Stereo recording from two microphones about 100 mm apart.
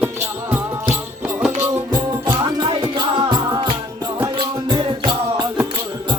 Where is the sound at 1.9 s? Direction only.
40° right (ahead or behind).